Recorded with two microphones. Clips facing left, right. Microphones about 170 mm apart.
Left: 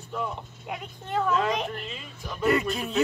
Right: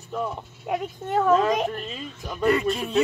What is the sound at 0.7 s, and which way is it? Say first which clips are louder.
Speech: right 6 dB; 45° right (ahead or behind).